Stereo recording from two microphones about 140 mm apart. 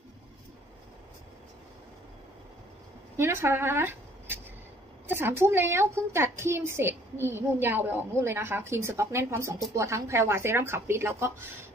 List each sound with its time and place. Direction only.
3.2 s a woman's voice: 20° right (ahead or behind)